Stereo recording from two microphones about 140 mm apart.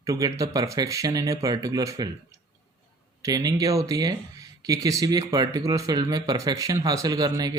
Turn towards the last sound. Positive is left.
turn(degrees=-25)  # may be behind; listen again after turning